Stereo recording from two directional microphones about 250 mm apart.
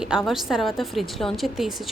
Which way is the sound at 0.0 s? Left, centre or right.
Centre.